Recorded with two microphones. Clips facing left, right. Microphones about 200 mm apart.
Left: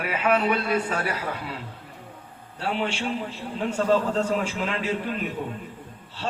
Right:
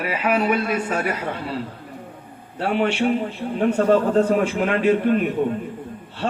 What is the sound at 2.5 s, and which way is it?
A man's voice, 55° right (ahead or behind).